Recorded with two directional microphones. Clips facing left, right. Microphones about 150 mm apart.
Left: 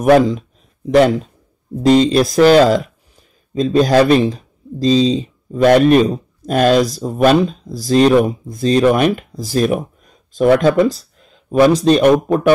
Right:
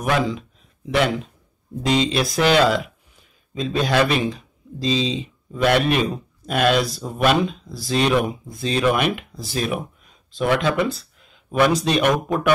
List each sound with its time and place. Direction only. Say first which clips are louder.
0.1 s speech: left 11 dB; 40° left (ahead or behind)